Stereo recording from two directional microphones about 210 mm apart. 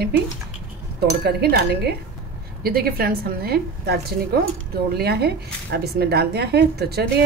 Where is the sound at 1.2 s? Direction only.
50° right (ahead or behind).